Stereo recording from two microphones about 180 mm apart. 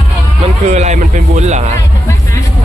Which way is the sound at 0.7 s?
40° right (ahead or behind).